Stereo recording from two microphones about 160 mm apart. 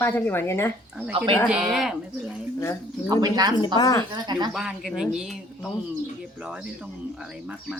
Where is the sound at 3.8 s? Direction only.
20° left (ahead or behind).